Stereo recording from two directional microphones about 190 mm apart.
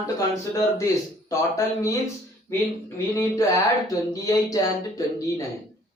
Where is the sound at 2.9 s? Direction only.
15° left (ahead or behind).